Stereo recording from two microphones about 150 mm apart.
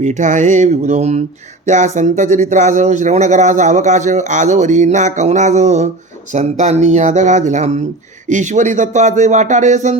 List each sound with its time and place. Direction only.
0.0 s speech: 55° right (ahead or behind)